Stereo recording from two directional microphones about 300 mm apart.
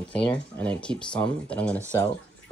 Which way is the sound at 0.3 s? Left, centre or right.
Centre.